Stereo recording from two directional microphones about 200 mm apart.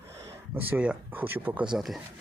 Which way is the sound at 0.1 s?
10° right (ahead or behind).